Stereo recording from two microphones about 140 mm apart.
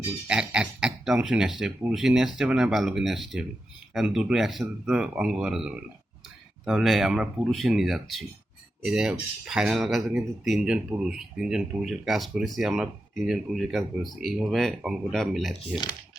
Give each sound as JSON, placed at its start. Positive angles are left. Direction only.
{"t": 0.3, "sound": "speech", "side_deg": -5}